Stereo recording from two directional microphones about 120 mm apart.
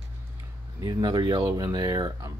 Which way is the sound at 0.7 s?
30° right (ahead or behind).